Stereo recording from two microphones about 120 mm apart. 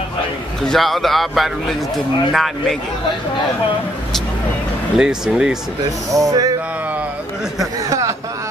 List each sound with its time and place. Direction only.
0.7 s a man's voice: centre (ahead or behind)
4.9 s a man's voice: 5° right (ahead or behind)
6.1 s speech: 30° right (ahead or behind)